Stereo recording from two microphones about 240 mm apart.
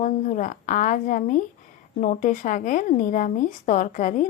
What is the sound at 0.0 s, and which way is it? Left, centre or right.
Speech, left.